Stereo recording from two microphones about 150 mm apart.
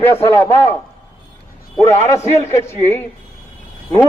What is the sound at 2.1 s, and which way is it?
A man's voice, 20° left (ahead or behind).